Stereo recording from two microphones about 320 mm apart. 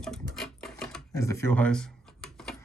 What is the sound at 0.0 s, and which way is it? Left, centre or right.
Sewing machine, centre.